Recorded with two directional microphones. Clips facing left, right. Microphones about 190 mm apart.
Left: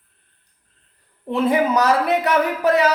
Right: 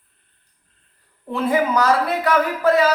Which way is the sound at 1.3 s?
20° left (ahead or behind).